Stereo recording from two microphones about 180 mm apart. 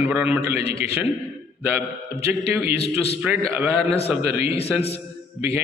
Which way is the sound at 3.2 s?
10° right (ahead or behind).